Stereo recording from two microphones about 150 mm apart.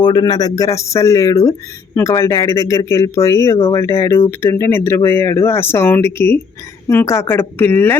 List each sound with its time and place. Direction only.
0.0 s speech: 30° left (ahead or behind); by 7.9 s 15° left (ahead or behind)